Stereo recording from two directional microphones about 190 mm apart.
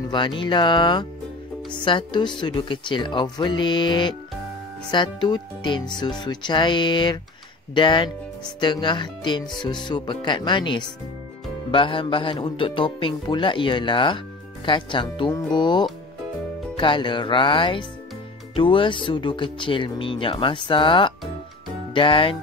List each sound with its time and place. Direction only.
0.1 s a man's voice: 25° left (ahead or behind)